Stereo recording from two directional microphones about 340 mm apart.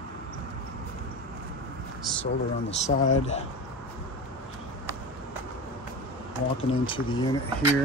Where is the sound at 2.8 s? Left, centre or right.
Centre.